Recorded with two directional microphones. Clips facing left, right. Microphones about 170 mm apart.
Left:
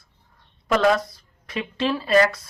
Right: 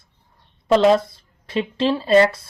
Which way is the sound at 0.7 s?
25° right (ahead or behind).